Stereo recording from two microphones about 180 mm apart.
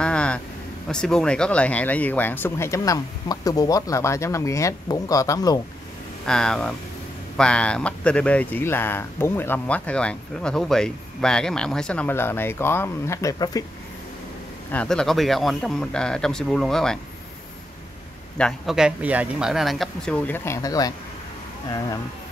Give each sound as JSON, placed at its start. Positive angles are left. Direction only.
{"t": 0.0, "sound": "a sound", "side_deg": 5}
{"t": 0.8, "sound": "speech", "side_deg": 5}
{"t": 6.2, "sound": "speech", "side_deg": 5}
{"t": 14.7, "sound": "speech", "side_deg": 5}
{"t": 18.4, "sound": "speech", "side_deg": 0}